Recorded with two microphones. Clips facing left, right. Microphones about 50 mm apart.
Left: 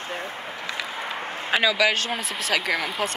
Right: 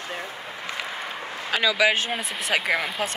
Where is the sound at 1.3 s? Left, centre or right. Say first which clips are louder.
Left 3 dB; left.